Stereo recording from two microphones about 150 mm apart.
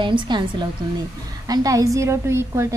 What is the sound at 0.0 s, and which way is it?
A woman's voice, 30° right (ahead or behind).